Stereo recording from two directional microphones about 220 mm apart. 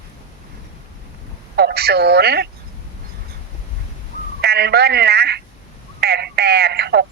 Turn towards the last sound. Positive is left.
turn(degrees=-45)  # may be behind; listen again after turning